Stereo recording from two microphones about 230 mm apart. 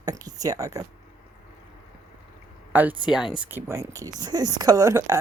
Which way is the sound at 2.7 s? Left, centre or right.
Centre.